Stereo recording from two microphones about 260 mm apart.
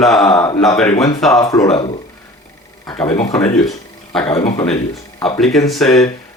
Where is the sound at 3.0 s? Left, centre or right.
Centre.